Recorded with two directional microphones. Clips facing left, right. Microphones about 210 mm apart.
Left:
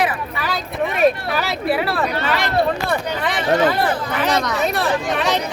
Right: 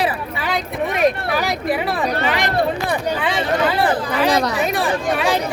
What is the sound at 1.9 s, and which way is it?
Speech, 15° right (ahead or behind).